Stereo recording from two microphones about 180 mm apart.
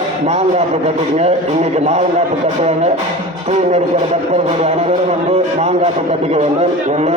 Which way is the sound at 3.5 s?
40° right (ahead or behind).